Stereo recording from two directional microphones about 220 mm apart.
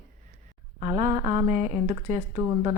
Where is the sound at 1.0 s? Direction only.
35° right (ahead or behind).